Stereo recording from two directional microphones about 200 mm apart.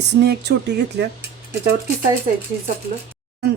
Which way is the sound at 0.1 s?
60° right (ahead or behind).